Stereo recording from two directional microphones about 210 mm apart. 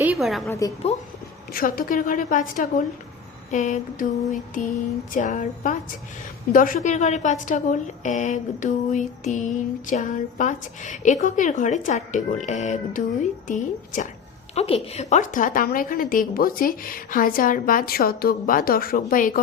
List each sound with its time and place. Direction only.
0.0 s a woman's voice: 5° right (ahead or behind)
0.4 s a woman's voice: 15° left (ahead or behind)
1.5 s a woman's voice: 40° left (ahead or behind)